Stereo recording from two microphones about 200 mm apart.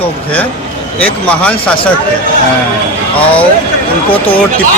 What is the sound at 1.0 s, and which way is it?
Speech, 5° left (ahead or behind).